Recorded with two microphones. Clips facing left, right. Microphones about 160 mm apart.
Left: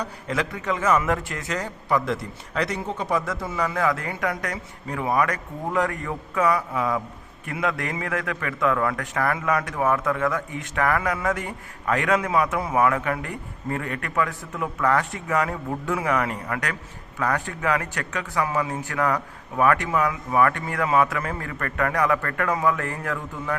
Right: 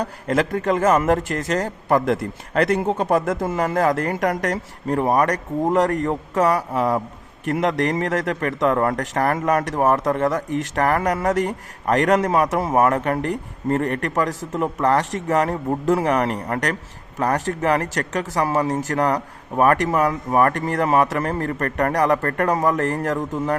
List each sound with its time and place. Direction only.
0.0 s speech: 50° right (ahead or behind)